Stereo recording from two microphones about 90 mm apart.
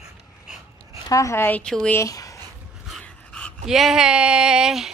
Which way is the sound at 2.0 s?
40° left (ahead or behind).